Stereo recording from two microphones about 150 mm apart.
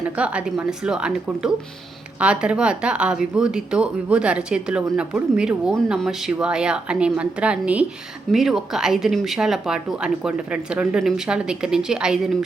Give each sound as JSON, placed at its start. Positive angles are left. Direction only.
{"t": 0.2, "sound": "a woman's voice", "side_deg": -10}